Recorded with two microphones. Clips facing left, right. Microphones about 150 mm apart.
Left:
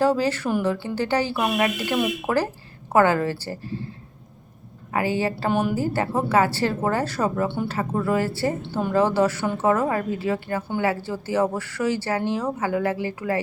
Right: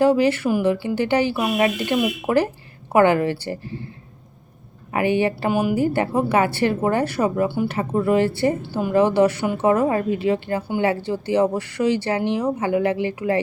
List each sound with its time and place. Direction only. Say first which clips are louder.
0.0 s a woman's voice: right 4 dB; 15° right (ahead or behind)
4.9 s speech: right 4 dB; 20° right (ahead or behind)
5.5 s a woman's voice: right 1 dB; 10° right (ahead or behind)
7.7 s a woman's voice: right 4 dB; 20° right (ahead or behind)